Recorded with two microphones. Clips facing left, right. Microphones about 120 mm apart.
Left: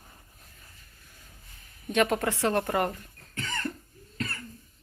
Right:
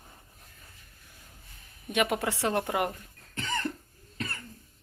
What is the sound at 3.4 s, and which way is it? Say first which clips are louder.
Cough: right 1 dB; 15° right (ahead or behind).